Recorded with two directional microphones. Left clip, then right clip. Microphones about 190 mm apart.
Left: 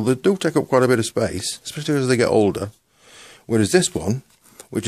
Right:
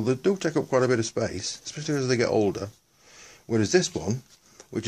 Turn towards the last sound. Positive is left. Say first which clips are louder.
# left 6 dB
turn(degrees=50)  # may be behind; listen again after turning